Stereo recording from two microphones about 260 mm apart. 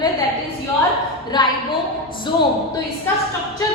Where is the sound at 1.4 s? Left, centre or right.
Centre.